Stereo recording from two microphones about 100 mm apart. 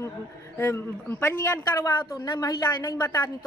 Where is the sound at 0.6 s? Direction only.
25° left (ahead or behind).